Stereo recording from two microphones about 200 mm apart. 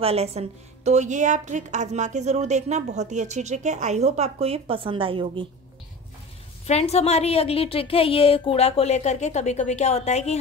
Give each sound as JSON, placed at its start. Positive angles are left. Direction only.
{"t": 0.0, "sound": "a woman's voice", "side_deg": -30}
{"t": 6.6, "sound": "a woman's voice", "side_deg": 30}